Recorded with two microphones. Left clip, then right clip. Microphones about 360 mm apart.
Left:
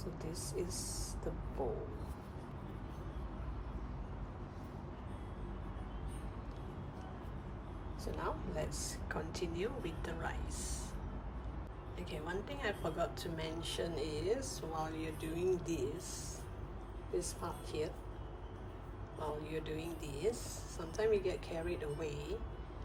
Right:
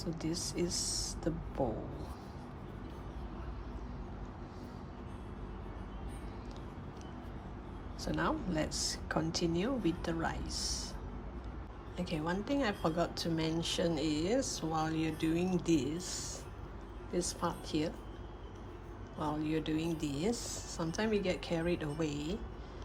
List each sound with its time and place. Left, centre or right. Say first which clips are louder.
0.2 s a woman's voice: right 5 dB; right
8.0 s speech: right 6 dB; centre
11.9 s a woman's voice: right 6 dB; centre
17.2 s a woman's voice: right 5 dB; centre
19.5 s a woman's voice: right 7 dB; centre